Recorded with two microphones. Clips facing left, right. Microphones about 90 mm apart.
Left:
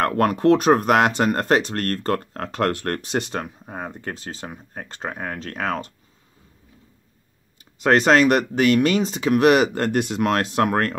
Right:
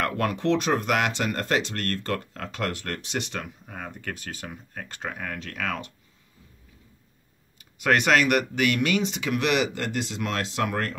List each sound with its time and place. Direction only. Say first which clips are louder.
0.0 s speech: left 7 dB; 45° left (ahead or behind)
7.8 s speech: left 5 dB; 35° left (ahead or behind); by 11.0 s 50° left (ahead or behind)